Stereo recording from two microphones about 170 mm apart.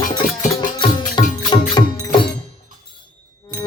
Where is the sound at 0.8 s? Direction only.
25° left (ahead or behind).